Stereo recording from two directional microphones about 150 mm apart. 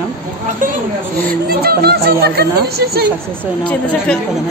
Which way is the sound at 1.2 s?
80° right.